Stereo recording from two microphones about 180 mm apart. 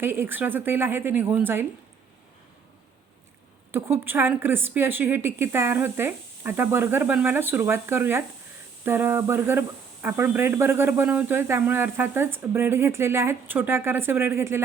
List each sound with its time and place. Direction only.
0.0 s speech: 10° right (ahead or behind)
3.7 s speech: 15° right (ahead or behind)